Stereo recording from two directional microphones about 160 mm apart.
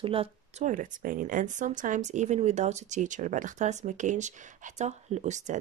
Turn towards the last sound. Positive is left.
turn(degrees=-50)  # may be behind; listen again after turning